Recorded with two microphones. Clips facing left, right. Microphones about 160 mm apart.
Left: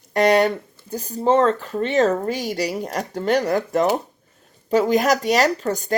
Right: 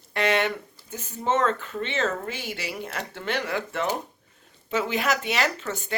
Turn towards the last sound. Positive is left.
turn(degrees=40)  # may be behind; listen again after turning